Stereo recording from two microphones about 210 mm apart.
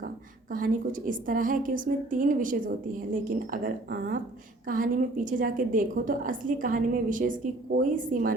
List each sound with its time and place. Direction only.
0.5 s a woman's voice: 40° right (ahead or behind)